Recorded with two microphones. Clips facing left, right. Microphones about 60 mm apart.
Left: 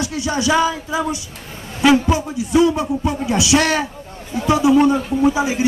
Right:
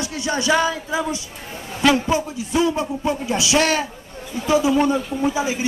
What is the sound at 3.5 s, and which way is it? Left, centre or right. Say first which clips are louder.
Speech: left 2 dB; centre.